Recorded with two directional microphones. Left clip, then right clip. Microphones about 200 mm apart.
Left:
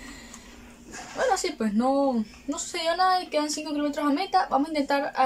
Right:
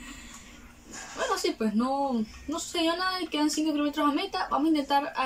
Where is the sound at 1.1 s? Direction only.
35° left (ahead or behind).